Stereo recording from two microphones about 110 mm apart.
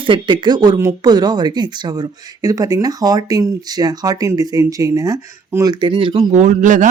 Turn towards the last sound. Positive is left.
turn(degrees=-90)